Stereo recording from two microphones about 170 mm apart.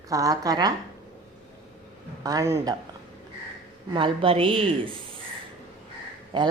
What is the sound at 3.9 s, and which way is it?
A woman's voice, 30° right (ahead or behind).